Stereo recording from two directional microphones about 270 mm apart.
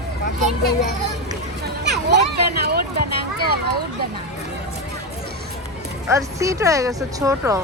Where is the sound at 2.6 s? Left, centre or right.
Right.